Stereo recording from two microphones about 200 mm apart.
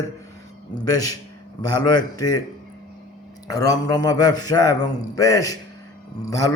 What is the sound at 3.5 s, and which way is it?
A man's voice, 20° left (ahead or behind).